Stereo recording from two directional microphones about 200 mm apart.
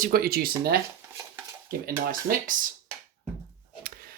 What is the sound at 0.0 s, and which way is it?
Speech, 50° right (ahead or behind).